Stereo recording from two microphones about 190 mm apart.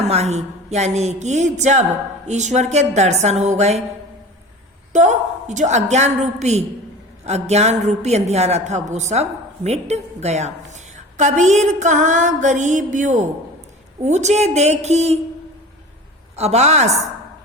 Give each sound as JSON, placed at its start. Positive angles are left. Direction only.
{"t": 0.1, "sound": "mantra", "side_deg": -35}
{"t": 4.9, "sound": "mantra", "side_deg": -40}
{"t": 16.3, "sound": "mantra", "side_deg": -35}